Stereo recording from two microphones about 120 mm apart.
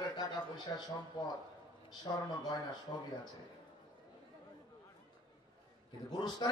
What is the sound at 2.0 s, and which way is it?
Speech, 35° left (ahead or behind).